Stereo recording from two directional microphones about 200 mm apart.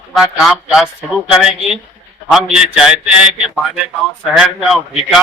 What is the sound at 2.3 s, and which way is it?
Speech, 5° right (ahead or behind).